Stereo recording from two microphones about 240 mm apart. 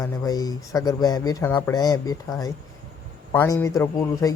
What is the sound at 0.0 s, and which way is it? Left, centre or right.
A man's voice, centre.